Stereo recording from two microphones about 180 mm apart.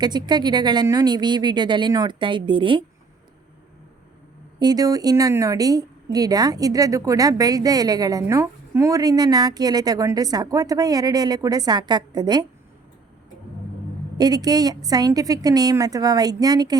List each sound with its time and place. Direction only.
0.0 s a woman's voice: 25° right (ahead or behind)
4.6 s a woman's voice: 20° right (ahead or behind)
14.2 s a woman's voice: 20° right (ahead or behind)